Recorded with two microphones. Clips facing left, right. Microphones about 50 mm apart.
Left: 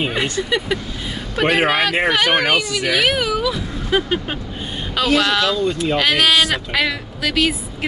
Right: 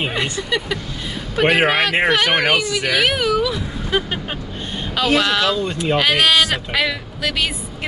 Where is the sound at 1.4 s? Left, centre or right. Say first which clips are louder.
Right 1 dB; centre.